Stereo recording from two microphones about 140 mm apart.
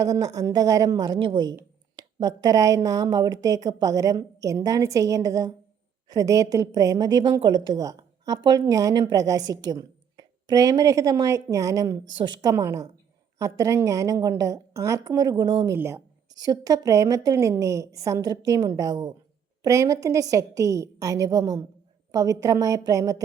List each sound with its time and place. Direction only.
0.0 s a woman's voice: 25° right (ahead or behind)
15.7 s a woman's voice: 20° right (ahead or behind)